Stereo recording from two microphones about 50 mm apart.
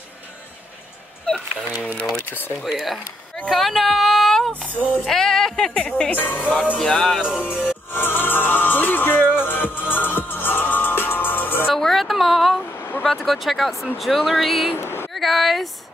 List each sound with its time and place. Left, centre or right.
1.2 s speech: centre
2.7 s speech: centre
4.5 s a sound: left
5.0 s speech: centre
6.1 s music: left
6.8 s music: centre
7.2 s speech: left
9.4 s music: left
11.7 s a sound: centre
12.7 s vehicle: left
13.0 s speech: centre
14.8 s a sound: left
15.1 s speech: centre